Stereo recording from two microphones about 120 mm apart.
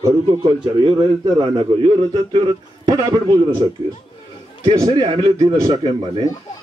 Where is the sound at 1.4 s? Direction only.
45° right (ahead or behind).